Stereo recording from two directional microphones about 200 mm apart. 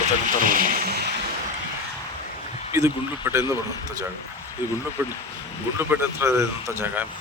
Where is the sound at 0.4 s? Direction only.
45° right (ahead or behind).